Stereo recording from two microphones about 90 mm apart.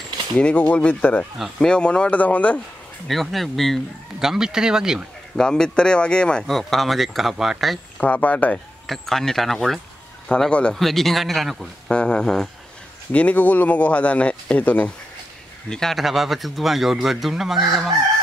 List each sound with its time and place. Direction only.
0.4 s speech: 15° left (ahead or behind)
3.1 s speech: centre (ahead or behind)
5.4 s speech: 10° left (ahead or behind)
8.0 s speech: 15° left (ahead or behind)
8.8 s speech: 5° left (ahead or behind)
11.9 s speech: 10° left (ahead or behind)
13.1 s speech: 15° left (ahead or behind)
15.7 s speech: 5° left (ahead or behind)